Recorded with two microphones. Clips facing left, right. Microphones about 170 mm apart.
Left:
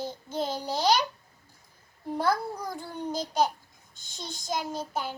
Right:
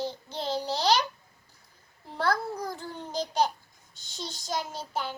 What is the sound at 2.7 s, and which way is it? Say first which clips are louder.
A child's voice: left 1 dB; 15° left (ahead or behind).